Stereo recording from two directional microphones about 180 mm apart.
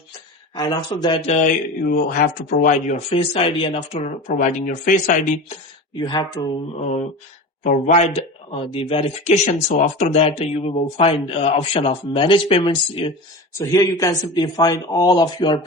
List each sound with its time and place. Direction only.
0.5 s speech: 20° left (ahead or behind)
1.5 s speech: 50° left (ahead or behind); by 4.1 s 30° left (ahead or behind)
4.3 s speech: 45° left (ahead or behind)
5.9 s speech: 20° left (ahead or behind)
7.6 s speech: 45° left (ahead or behind); by 15.6 s 25° left (ahead or behind)